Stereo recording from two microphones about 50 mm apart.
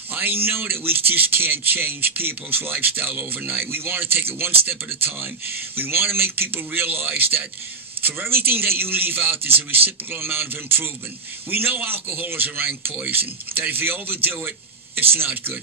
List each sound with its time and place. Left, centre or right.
0.1 s a man's voice: right